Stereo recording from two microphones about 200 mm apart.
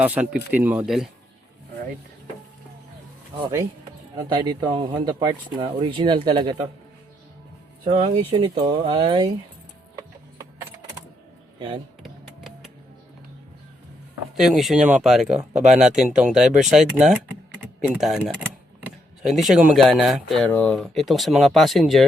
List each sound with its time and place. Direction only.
0.0 s speech: 5° right (ahead or behind)
3.3 s speech: 15° right (ahead or behind)
7.9 s speech: 25° right (ahead or behind)
12.0 s music: centre (ahead or behind)
14.3 s speech: centre (ahead or behind)
19.2 s speech: centre (ahead or behind)